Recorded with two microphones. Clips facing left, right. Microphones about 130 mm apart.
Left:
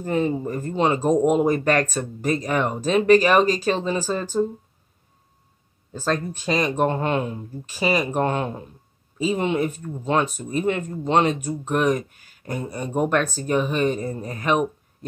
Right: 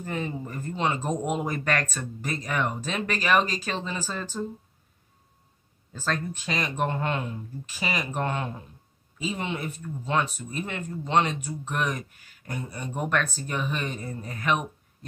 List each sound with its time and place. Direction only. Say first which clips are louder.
0.0 s speech: left 9 dB; 35° left (ahead or behind)
5.9 s speech: left 6 dB; 35° left (ahead or behind)
9.2 s speech: left 9 dB; 45° left (ahead or behind)